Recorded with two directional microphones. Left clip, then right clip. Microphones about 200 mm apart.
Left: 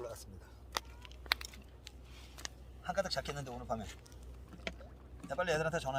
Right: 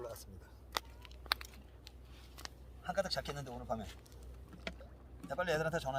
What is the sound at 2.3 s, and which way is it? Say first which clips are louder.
A man's voice: left 3 dB; 15° right (ahead or behind).